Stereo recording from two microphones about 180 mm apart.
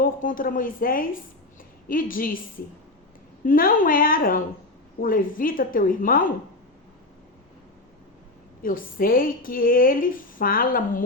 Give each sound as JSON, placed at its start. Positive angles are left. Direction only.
{"t": 0.0, "sound": "a woman's voice", "side_deg": 50}
{"t": 3.4, "sound": "a woman's voice", "side_deg": 50}
{"t": 8.6, "sound": "a woman's voice", "side_deg": 50}